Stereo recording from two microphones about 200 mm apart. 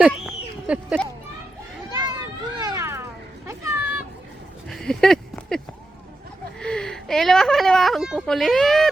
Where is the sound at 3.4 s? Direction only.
15° right (ahead or behind).